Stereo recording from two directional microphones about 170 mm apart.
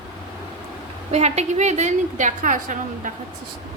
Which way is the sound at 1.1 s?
40° right (ahead or behind).